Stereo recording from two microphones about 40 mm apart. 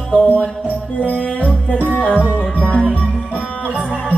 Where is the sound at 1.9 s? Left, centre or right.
Left.